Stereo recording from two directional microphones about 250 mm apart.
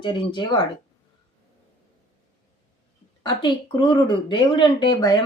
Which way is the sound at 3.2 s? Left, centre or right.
Centre.